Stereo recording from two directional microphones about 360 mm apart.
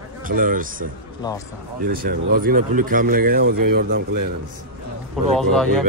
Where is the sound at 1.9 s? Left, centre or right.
Right.